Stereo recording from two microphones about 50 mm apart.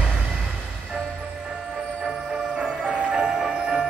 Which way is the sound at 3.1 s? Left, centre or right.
Centre.